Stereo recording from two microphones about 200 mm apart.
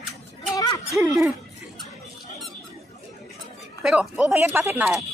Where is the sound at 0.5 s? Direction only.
20° left (ahead or behind).